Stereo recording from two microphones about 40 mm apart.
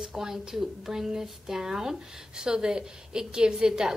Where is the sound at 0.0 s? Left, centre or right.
Centre.